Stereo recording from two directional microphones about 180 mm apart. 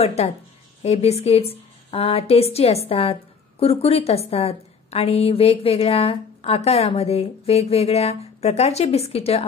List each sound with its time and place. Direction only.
0.0 s a woman's voice: 35° left (ahead or behind)